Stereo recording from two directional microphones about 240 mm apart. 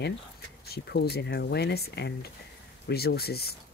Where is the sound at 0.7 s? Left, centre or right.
Left.